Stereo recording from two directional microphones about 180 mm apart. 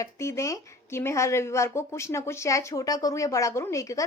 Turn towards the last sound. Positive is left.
turn(degrees=20)  # may be behind; listen again after turning